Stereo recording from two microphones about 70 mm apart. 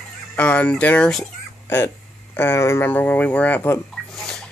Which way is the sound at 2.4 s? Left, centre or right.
Left.